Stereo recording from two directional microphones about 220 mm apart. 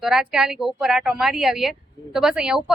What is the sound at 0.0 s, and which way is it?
A woman's voice, centre (ahead or behind).